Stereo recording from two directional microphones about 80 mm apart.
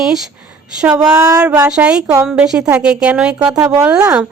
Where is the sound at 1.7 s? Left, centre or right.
Centre.